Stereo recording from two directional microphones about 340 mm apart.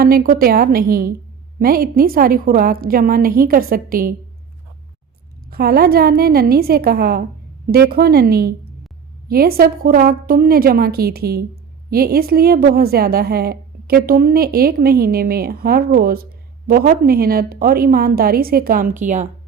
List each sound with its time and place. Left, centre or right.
0.0 s a woman's voice: right
5.5 s a woman's voice: right